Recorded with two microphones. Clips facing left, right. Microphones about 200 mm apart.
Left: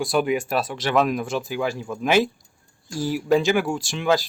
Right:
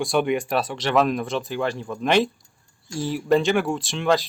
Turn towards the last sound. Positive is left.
turn(degrees=0)  # may be behind; listen again after turning